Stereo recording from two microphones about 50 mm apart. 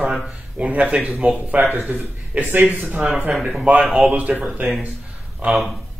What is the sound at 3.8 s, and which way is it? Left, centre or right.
Speech, centre.